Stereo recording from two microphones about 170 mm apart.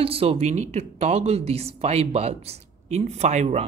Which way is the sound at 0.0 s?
35° right (ahead or behind).